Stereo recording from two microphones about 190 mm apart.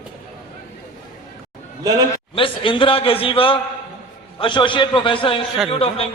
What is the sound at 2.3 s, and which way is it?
A man's voice, 25° left (ahead or behind).